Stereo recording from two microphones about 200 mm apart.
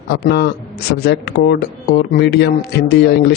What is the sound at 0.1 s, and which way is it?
Speech, 55° left (ahead or behind).